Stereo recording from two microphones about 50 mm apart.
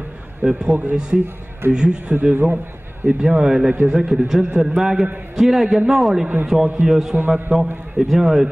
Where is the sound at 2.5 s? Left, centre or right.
Right.